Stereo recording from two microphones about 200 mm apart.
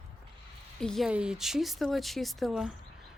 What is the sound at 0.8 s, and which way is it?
A woman's voice, centre (ahead or behind).